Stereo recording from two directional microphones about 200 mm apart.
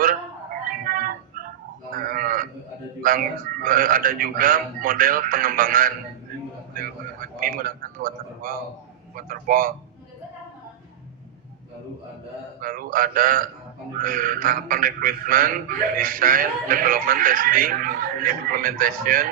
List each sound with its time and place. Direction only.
0.6 s music: 45° right (ahead or behind)
2.0 s sheep: 45° right (ahead or behind)
3.0 s speech: 45° right (ahead or behind)
6.7 s a sound: 45° right (ahead or behind)
9.1 s speech: 45° right (ahead or behind)
12.5 s speech: 45° right (ahead or behind)